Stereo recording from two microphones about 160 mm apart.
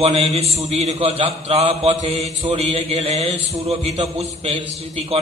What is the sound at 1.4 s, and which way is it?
Mantra, 40° right (ahead or behind).